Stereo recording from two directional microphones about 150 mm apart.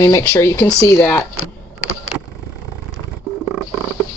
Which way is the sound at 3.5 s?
10° right (ahead or behind).